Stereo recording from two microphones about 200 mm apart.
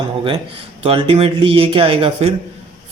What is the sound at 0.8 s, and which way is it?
A man's voice, 30° right (ahead or behind).